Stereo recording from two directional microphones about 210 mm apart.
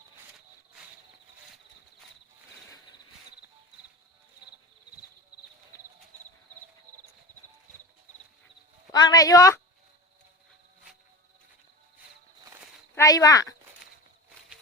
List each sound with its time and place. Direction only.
2.6 s cricket: 15° left (ahead or behind)
8.9 s a woman's voice: 20° left (ahead or behind)
13.0 s speech: 15° left (ahead or behind)